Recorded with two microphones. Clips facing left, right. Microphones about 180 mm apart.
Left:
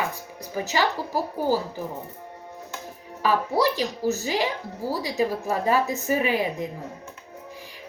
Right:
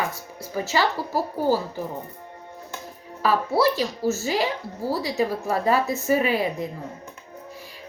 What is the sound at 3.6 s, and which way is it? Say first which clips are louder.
Speech: right 2 dB; 15° left (ahead or behind).